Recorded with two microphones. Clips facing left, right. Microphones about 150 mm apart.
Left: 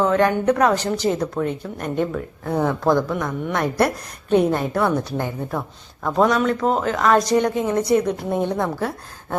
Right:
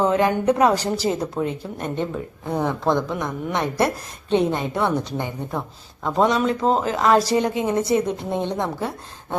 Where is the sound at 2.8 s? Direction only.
Centre (ahead or behind).